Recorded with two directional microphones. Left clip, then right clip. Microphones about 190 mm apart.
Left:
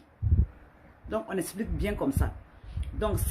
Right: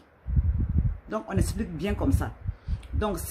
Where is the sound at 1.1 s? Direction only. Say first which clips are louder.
Even; 20° right (ahead or behind).